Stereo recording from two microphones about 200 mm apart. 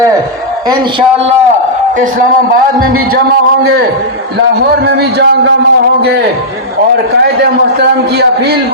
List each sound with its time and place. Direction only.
0.7 s speech: 30° right (ahead or behind)
4.9 s speech: 55° right (ahead or behind)